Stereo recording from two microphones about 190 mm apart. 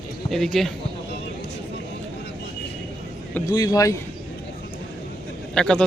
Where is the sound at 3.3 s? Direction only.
20° left (ahead or behind).